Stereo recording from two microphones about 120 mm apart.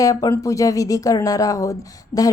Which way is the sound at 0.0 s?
30° left (ahead or behind).